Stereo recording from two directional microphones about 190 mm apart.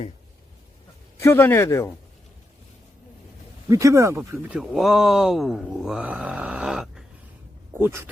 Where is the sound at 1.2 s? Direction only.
10° left (ahead or behind).